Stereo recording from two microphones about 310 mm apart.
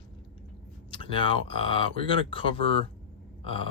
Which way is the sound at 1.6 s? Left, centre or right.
Centre.